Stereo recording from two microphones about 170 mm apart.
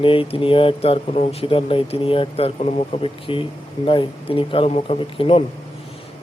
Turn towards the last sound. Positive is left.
turn(degrees=35)  # may be behind; listen again after turning